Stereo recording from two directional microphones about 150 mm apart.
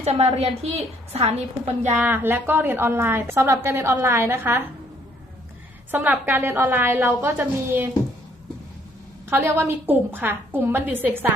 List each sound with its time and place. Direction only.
0.0 s a woman's voice: 45° right (ahead or behind)
2.0 s a woman's voice: 15° right (ahead or behind)
5.9 s a woman's voice: 10° right (ahead or behind)
9.3 s a woman's voice: 15° right (ahead or behind)